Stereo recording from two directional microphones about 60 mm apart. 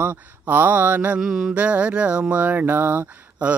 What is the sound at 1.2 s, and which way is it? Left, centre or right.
Mantra, centre.